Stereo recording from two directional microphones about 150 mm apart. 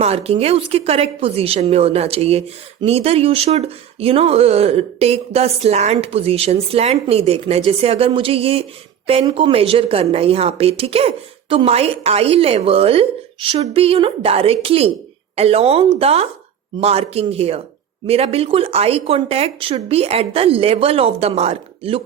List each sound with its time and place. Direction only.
0.0 s a woman's voice: 45° right (ahead or behind)